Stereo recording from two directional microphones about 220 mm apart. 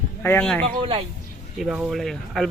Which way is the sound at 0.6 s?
25° right (ahead or behind).